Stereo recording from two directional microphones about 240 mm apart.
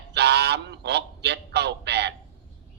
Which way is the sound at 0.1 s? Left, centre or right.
Right.